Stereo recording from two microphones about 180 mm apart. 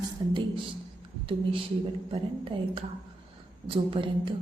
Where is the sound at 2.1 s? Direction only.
30° right (ahead or behind).